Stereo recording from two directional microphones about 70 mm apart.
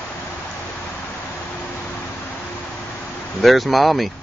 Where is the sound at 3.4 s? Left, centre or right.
Centre.